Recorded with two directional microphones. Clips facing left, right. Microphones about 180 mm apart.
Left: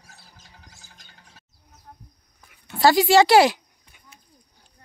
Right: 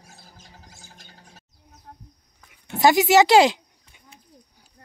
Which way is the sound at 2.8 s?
20° right (ahead or behind).